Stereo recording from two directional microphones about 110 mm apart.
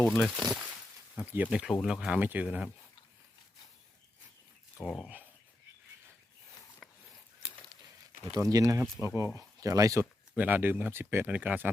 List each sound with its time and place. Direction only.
0.0 s speech: centre (ahead or behind)
2.2 s speech: 15° right (ahead or behind)
4.8 s speech: 5° right (ahead or behind)
6.8 s a sound: 5° left (ahead or behind)
8.2 s speech: 30° right (ahead or behind)
10.3 s speech: 15° right (ahead or behind)